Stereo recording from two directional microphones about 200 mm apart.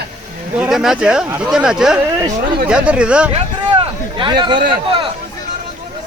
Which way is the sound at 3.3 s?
25° right (ahead or behind).